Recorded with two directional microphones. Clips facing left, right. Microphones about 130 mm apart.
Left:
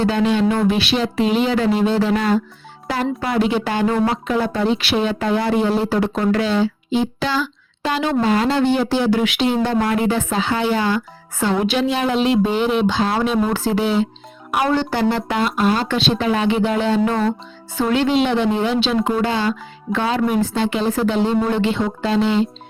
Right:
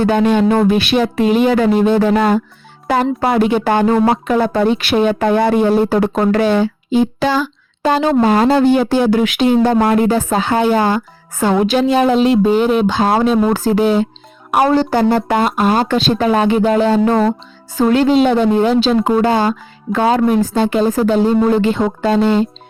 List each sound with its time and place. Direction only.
0.0 s speech: 50° right (ahead or behind)